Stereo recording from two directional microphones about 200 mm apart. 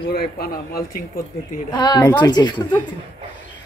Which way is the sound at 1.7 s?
20° left (ahead or behind).